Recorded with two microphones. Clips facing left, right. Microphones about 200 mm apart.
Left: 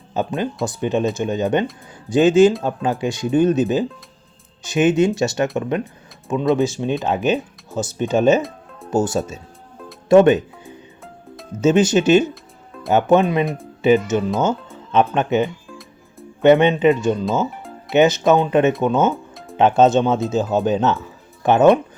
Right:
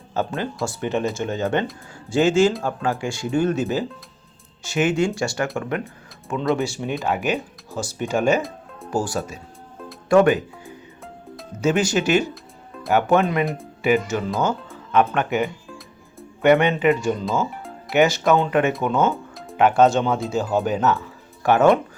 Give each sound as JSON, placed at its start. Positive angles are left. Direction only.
{"t": 0.1, "sound": "speech", "side_deg": 15}
{"t": 8.4, "sound": "music", "side_deg": 0}
{"t": 8.9, "sound": "speech", "side_deg": 20}
{"t": 12.3, "sound": "music", "side_deg": 0}
{"t": 12.9, "sound": "speech", "side_deg": 20}
{"t": 13.4, "sound": "speech", "side_deg": 0}
{"t": 13.8, "sound": "speech", "side_deg": 20}
{"t": 17.5, "sound": "music", "side_deg": 0}
{"t": 17.9, "sound": "speech", "side_deg": 20}
{"t": 19.1, "sound": "music", "side_deg": 0}
{"t": 19.5, "sound": "speech", "side_deg": 25}